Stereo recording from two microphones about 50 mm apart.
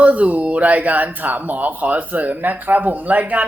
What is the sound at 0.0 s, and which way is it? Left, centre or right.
Speech, right.